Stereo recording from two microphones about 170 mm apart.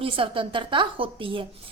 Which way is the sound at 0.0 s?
30° right (ahead or behind).